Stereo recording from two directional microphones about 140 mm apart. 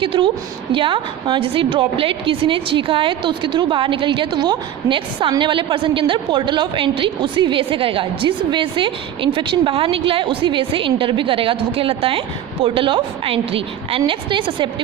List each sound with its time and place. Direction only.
0.0 s a woman's voice: 40° right (ahead or behind)